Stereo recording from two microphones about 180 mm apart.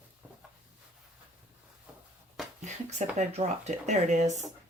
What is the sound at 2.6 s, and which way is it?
Speech, 40° right (ahead or behind).